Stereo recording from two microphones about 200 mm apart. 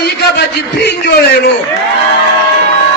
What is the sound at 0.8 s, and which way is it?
Speech, 55° left (ahead or behind).